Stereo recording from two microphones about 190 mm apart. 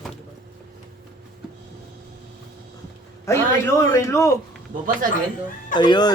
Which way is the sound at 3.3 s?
15° left (ahead or behind).